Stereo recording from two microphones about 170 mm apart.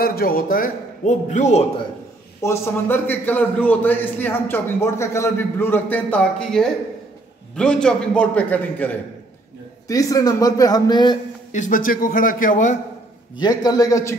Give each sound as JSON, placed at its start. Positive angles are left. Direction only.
{"t": 0.0, "sound": "a man's voice", "side_deg": 60}
{"t": 2.4, "sound": "a man's voice", "side_deg": 15}
{"t": 9.8, "sound": "a man's voice", "side_deg": 20}
{"t": 11.5, "sound": "a man's voice", "side_deg": 50}
{"t": 13.4, "sound": "a man's voice", "side_deg": 25}